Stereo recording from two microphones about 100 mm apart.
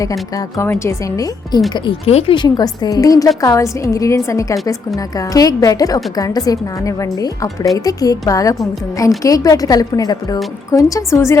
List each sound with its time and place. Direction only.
0.0 s a woman's voice: 35° left (ahead or behind)
2.0 s speech: 90° left
2.3 s a woman's voice: 45° left (ahead or behind); by 11.3 s 30° left (ahead or behind)